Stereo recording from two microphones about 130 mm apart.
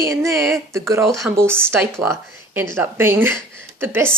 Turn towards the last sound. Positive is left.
turn(degrees=-15)  # may be behind; listen again after turning